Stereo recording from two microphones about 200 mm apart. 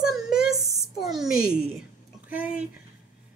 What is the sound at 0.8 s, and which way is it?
A woman's voice, centre (ahead or behind).